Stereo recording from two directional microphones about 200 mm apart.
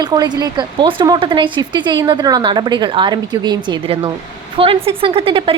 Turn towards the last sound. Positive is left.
turn(degrees=-25)  # may be behind; listen again after turning